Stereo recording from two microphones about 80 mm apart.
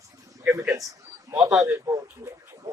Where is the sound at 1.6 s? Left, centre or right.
Right.